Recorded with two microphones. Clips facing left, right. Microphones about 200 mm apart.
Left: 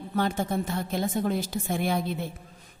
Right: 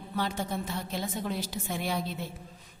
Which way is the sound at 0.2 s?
50° left (ahead or behind).